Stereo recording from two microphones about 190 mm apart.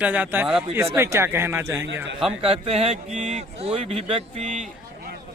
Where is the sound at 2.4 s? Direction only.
30° right (ahead or behind).